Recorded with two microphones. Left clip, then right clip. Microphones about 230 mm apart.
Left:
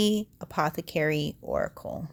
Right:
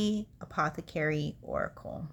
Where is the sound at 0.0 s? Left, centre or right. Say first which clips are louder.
Left 7 dB; left.